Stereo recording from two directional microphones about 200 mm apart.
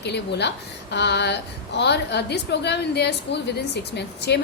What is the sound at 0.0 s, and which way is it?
A woman's voice, 55° left (ahead or behind).